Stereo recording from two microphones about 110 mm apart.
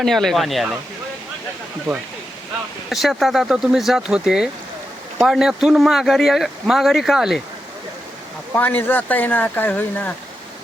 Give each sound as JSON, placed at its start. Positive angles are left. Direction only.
{"t": 0.0, "sound": "speech", "side_deg": 0}
{"t": 2.9, "sound": "speech", "side_deg": 0}
{"t": 8.5, "sound": "speech", "side_deg": 15}